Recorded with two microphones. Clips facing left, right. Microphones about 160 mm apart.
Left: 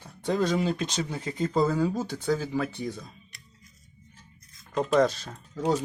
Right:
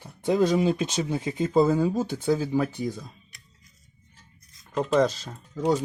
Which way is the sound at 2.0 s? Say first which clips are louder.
Right 4 dB; centre (ahead or behind).